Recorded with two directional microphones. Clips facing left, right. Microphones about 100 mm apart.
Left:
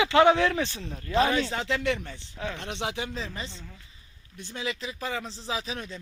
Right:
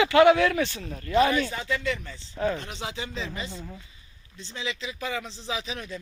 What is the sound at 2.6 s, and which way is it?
Speech, 70° left (ahead or behind).